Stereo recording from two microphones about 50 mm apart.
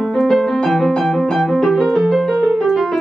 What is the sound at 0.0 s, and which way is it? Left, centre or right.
Music, centre.